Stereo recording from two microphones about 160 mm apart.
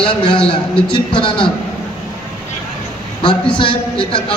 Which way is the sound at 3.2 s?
30° left (ahead or behind).